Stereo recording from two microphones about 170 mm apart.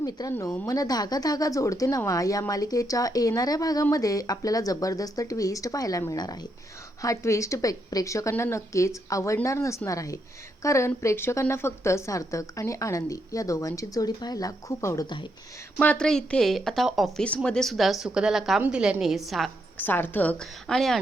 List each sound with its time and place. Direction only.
0.0 s a woman's voice: 20° left (ahead or behind)
15.8 s a woman's voice: 5° left (ahead or behind)
19.8 s a woman's voice: 10° left (ahead or behind)